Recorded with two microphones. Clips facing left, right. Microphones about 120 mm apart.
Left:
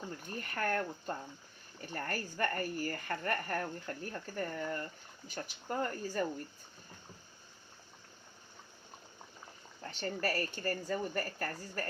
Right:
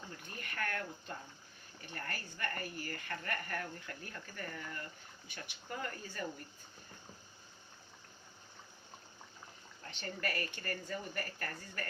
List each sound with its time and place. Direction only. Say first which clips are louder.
0.3 s speech: left 6 dB; 35° left (ahead or behind)
9.8 s speech: left 5 dB; 35° left (ahead or behind)